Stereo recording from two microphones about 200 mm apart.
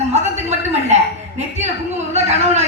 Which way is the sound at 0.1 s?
35° right (ahead or behind).